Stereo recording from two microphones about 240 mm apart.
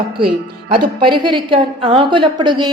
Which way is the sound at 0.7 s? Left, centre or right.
Centre.